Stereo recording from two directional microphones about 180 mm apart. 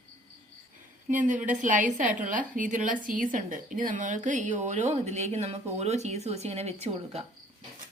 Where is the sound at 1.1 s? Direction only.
45° right (ahead or behind).